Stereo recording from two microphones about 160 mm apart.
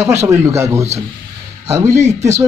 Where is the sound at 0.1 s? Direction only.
15° right (ahead or behind).